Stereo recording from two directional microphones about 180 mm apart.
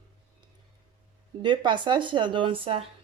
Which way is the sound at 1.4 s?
25° right (ahead or behind).